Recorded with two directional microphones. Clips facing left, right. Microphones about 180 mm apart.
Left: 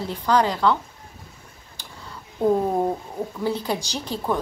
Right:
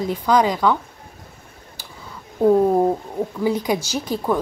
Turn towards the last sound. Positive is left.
turn(degrees=-10)  # may be behind; listen again after turning